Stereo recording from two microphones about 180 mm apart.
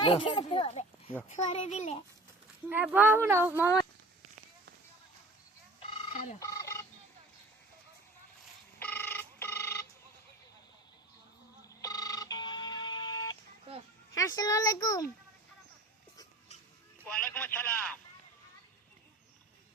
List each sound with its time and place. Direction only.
0.0 s a child's voice: 30° left (ahead or behind)
2.6 s speech: 10° right (ahead or behind)
6.4 s a sound: 20° left (ahead or behind)
8.8 s ringtone: 10° left (ahead or behind)
11.7 s a sound: 20° left (ahead or behind)
14.1 s speech: 20° left (ahead or behind)
17.0 s a man's voice: 5° left (ahead or behind)